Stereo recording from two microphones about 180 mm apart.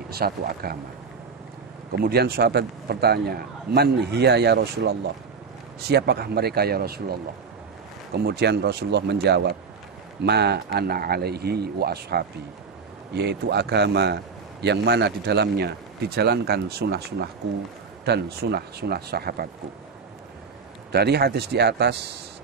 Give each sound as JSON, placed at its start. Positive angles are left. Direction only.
{"t": 0.1, "sound": "a man's voice", "side_deg": -60}
{"t": 1.9, "sound": "a man's voice", "side_deg": -60}
{"t": 20.9, "sound": "a man's voice", "side_deg": -65}